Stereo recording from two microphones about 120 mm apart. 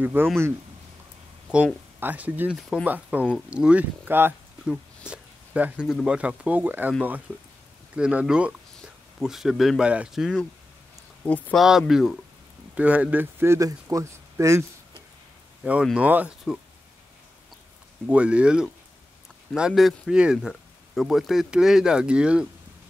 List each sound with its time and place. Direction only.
0.0 s speech: 15° right (ahead or behind)
1.5 s speech: 15° right (ahead or behind)
4.6 s a sound: 10° right (ahead or behind)
6.0 s speech: 10° right (ahead or behind)
11.2 s speech: 15° left (ahead or behind)
11.5 s speech: 5° right (ahead or behind); by 14.6 s 25° right (ahead or behind)
15.6 s speech: 5° right (ahead or behind)
18.0 s speech: 10° right (ahead or behind)